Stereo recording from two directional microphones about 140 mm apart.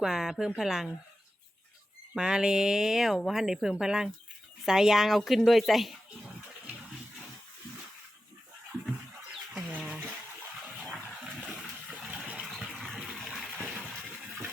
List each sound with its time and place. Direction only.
0.0 s speech: 5° right (ahead or behind)
2.1 s speech: 5° right (ahead or behind)
9.6 s a sound: 5° right (ahead or behind)
10.9 s water: 5° right (ahead or behind)